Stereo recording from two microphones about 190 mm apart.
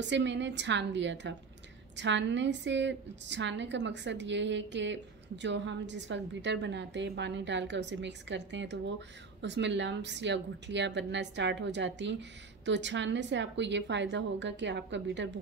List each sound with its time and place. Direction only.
0.0 s a woman's voice: 70° right (ahead or behind)